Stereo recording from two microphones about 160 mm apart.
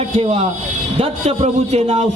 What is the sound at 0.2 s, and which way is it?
A man's voice, 45° right (ahead or behind).